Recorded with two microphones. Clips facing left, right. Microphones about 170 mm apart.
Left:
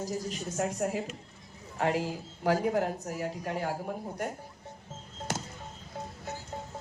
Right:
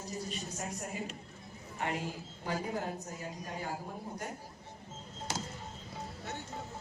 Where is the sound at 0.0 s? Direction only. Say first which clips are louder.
Left 6 dB; 80° left.